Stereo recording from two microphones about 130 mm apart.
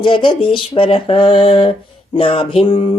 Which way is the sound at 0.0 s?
40° left (ahead or behind).